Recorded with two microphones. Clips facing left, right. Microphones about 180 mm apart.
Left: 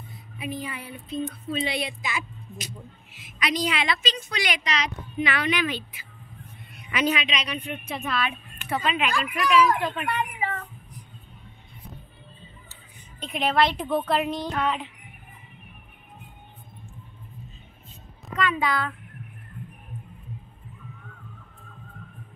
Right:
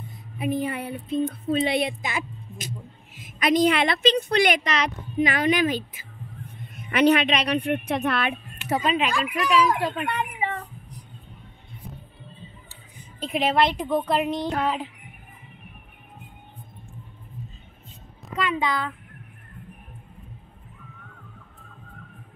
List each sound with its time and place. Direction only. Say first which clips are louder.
0.4 s a woman's voice: right 7 dB; 55° right (ahead or behind)
8.6 s speech: right 3 dB; 40° right (ahead or behind)
9.8 s a sound: right 1 dB; 30° right (ahead or behind)
13.3 s a woman's voice: right 3 dB; centre (ahead or behind)
13.6 s a woman's voice: left 1 dB; 15° right (ahead or behind)
14.5 s speech: right 2 dB; 35° right (ahead or behind)
18.4 s a woman's voice: even; 20° right (ahead or behind)